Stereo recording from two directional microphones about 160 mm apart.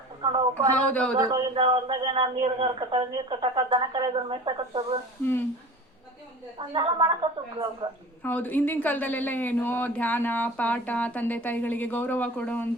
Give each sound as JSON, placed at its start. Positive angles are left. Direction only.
{"t": 0.2, "sound": "a sound", "side_deg": -30}
{"t": 0.7, "sound": "speech", "side_deg": 10}
{"t": 1.1, "sound": "a woman's voice", "side_deg": -25}
{"t": 1.5, "sound": "speech", "side_deg": -35}
{"t": 6.6, "sound": "a woman's voice", "side_deg": -30}
{"t": 8.2, "sound": "speech", "side_deg": 10}